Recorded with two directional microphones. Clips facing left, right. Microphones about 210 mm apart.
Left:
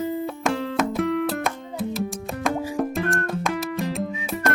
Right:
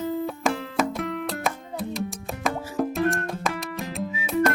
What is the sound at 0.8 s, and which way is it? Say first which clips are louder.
Music: left 4 dB; centre (ahead or behind).